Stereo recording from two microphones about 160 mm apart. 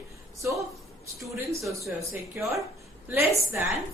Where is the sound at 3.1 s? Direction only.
15° right (ahead or behind).